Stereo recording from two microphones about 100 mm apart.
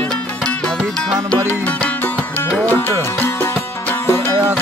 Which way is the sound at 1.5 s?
15° left (ahead or behind).